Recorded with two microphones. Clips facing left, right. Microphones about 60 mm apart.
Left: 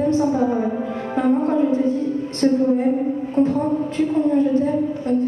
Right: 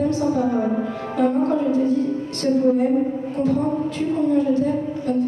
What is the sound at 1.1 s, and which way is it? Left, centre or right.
Music, left.